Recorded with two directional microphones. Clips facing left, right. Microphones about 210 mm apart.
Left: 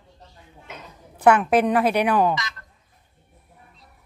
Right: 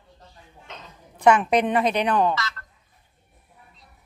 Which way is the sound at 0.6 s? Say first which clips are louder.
Left 2 dB; 10° left (ahead or behind).